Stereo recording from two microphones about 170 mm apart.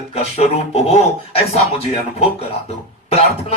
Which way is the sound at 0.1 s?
40° left (ahead or behind).